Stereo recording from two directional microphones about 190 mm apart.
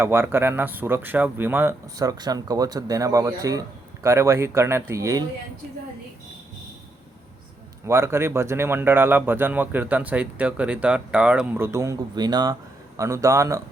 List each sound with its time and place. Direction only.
0.0 s speech: 15° right (ahead or behind)
7.9 s speech: 15° right (ahead or behind)